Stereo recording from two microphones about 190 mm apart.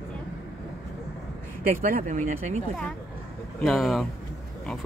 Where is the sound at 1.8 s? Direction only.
45° right (ahead or behind).